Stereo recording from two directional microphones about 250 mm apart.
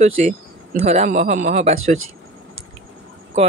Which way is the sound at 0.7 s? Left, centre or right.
Right.